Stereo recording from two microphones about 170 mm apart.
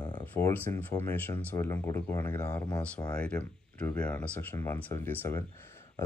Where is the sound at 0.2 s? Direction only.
10° left (ahead or behind).